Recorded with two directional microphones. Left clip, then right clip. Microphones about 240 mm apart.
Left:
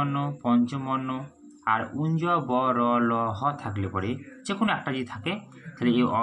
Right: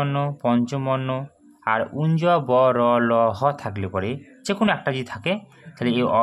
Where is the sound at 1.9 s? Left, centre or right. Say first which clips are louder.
Right 6 dB; right.